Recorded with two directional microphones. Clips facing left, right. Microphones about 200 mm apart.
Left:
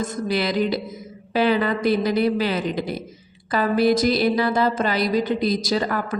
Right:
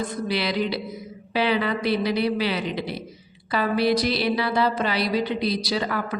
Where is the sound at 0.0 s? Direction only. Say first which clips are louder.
Left 3 dB; 45° left (ahead or behind).